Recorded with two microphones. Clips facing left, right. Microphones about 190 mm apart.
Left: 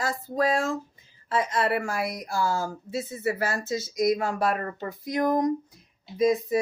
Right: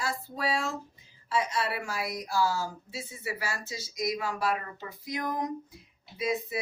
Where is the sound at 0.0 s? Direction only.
45° left (ahead or behind).